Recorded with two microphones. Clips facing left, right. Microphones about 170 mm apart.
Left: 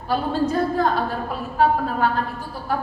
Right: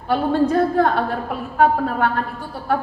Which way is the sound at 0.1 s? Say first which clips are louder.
Right 4 dB; 60° right (ahead or behind).